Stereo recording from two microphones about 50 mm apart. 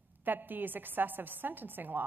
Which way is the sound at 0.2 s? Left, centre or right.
Right.